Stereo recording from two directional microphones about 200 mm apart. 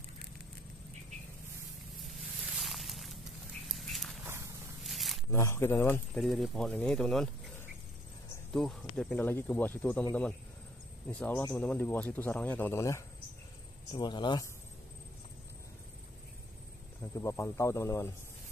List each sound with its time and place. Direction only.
2.5 s a sound: centre (ahead or behind)
4.3 s walk: 15° right (ahead or behind)
4.8 s a sound: centre (ahead or behind)
5.3 s speech: 15° left (ahead or behind)
8.5 s speech: centre (ahead or behind)
11.1 s speech: 5° left (ahead or behind); by 14.5 s 20° left (ahead or behind)
17.0 s speech: 15° left (ahead or behind)